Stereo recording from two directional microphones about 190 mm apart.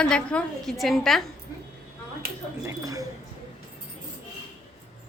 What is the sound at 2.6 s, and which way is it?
Speech, 20° right (ahead or behind).